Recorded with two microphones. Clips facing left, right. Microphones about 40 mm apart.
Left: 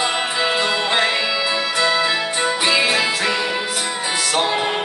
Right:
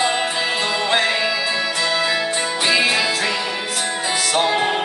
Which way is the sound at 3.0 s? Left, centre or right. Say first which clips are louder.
Left 1 dB; centre.